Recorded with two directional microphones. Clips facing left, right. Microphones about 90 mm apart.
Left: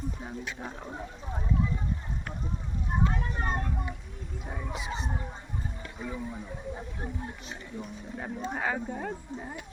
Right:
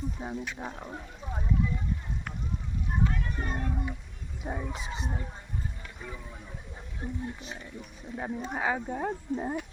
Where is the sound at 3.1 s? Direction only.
35° left (ahead or behind).